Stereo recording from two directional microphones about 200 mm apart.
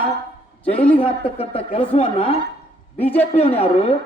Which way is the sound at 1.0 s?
30° left (ahead or behind).